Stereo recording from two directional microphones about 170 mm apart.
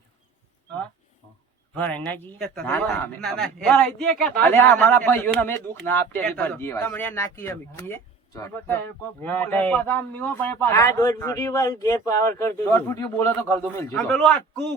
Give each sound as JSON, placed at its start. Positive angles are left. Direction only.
{"t": 1.7, "sound": "speech", "side_deg": 10}
{"t": 13.9, "sound": "a man's voice", "side_deg": 5}